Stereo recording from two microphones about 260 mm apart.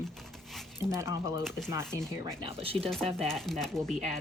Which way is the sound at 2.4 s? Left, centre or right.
Right.